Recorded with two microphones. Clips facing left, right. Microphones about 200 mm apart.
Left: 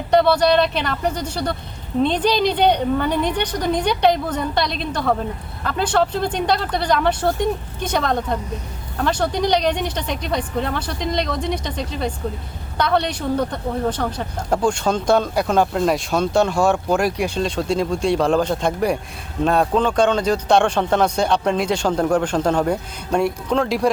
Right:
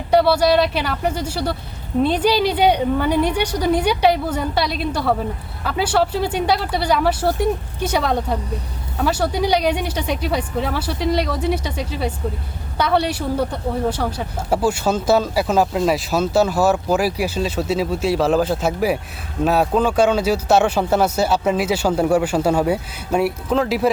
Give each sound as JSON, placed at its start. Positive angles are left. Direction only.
{"t": 0.1, "sound": "a man's voice", "side_deg": -10}